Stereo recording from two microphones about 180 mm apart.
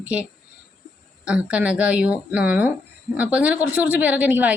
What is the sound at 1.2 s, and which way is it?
Speech, 5° right (ahead or behind).